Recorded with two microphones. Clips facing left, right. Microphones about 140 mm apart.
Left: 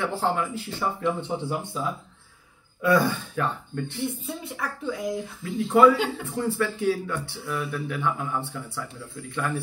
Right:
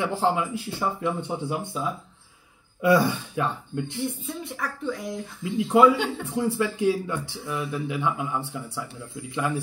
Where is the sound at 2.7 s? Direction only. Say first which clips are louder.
Right 1 dB; 20° right (ahead or behind).